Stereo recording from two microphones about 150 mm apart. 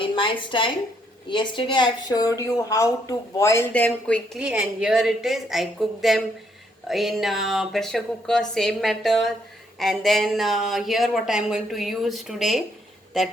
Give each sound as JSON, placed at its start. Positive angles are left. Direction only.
{"t": 0.0, "sound": "a woman's voice", "side_deg": 35}
{"t": 4.4, "sound": "speech", "side_deg": -5}